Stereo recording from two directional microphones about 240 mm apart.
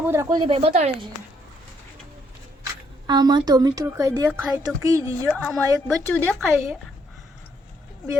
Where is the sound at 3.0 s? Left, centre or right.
Centre.